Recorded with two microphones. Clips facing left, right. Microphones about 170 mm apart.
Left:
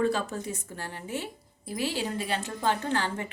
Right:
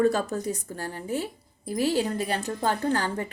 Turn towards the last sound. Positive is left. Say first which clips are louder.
# right 3 dB
turn(degrees=-40)  # may be behind; listen again after turning